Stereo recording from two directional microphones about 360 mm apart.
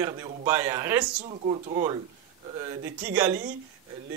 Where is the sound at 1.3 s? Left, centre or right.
Centre.